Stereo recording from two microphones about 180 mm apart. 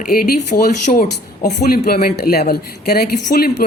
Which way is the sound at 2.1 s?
60° left (ahead or behind).